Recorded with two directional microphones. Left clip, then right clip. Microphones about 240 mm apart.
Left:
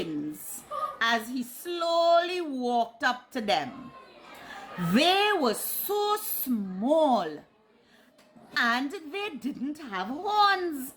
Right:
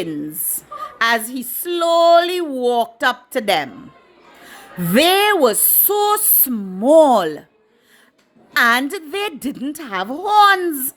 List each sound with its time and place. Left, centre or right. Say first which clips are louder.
0.9 s speech: right 11 dB; right
4.9 s speech: right 10 dB; right
8.5 s speech: right 12 dB; right